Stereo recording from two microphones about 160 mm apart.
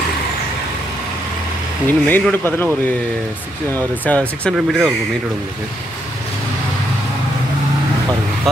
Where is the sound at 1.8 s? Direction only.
10° left (ahead or behind).